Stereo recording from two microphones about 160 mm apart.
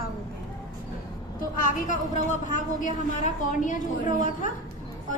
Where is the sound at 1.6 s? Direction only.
50° left (ahead or behind).